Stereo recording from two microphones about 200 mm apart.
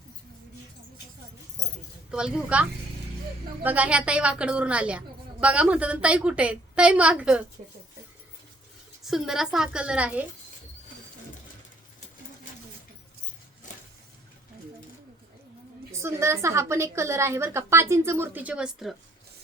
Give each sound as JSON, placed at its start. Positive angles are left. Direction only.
{"t": 2.0, "sound": "a woman's voice", "side_deg": -5}
{"t": 9.0, "sound": "a woman's voice", "side_deg": 0}
{"t": 13.7, "sound": "vehicle", "side_deg": 35}
{"t": 15.9, "sound": "a woman's voice", "side_deg": -15}